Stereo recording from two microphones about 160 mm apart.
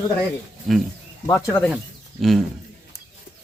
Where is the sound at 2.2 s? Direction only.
Centre (ahead or behind).